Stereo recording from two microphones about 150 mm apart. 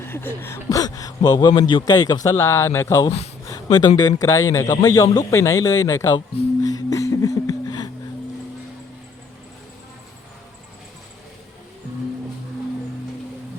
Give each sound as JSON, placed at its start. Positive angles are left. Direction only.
{"t": 0.0, "sound": "a man's voice", "side_deg": 15}
{"t": 6.6, "sound": "music", "side_deg": 25}